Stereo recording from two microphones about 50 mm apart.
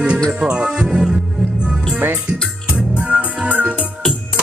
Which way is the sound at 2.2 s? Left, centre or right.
Centre.